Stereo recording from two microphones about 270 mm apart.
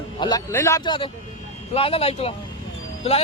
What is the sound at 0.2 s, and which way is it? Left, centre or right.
A man's voice, centre.